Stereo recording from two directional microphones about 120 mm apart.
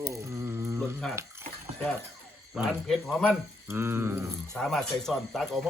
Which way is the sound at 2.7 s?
5° left (ahead or behind).